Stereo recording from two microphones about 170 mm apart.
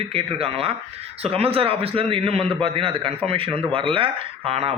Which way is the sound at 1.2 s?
35° right (ahead or behind).